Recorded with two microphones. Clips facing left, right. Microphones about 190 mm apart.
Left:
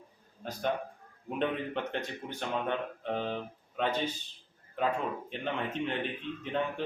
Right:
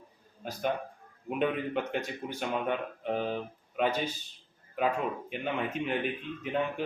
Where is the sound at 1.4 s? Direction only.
10° right (ahead or behind).